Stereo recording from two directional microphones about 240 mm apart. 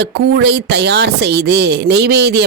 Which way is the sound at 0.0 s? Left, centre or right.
Right.